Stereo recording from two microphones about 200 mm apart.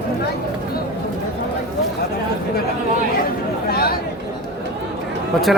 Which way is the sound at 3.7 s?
50° left (ahead or behind).